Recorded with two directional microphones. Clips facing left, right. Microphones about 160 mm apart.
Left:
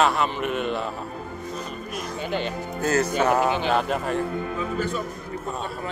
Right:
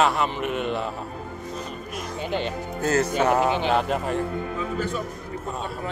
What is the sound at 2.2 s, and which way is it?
Speech, 30° right (ahead or behind).